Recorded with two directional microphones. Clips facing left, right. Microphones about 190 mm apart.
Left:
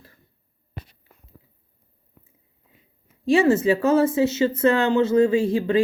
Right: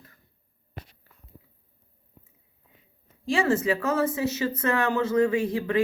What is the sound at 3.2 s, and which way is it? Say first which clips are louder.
Speech: left 6 dB; 25° left (ahead or behind).